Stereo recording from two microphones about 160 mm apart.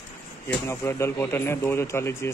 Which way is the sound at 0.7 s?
15° left (ahead or behind).